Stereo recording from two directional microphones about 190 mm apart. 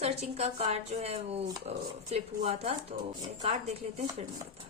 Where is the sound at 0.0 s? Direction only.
35° right (ahead or behind).